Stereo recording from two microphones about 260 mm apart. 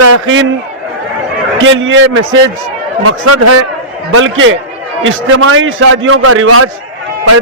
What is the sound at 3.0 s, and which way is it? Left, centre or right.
Speech, right.